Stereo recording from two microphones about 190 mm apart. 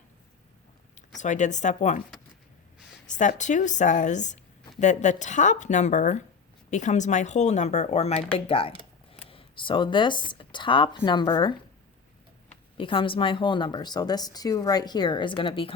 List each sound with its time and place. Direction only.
1.1 s speech: 40° left (ahead or behind)
3.1 s speech: 40° left (ahead or behind); by 11.5 s 25° left (ahead or behind)
12.7 s speech: 25° left (ahead or behind)